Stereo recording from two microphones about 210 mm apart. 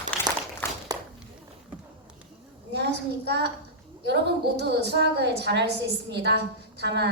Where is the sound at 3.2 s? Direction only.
55° right (ahead or behind).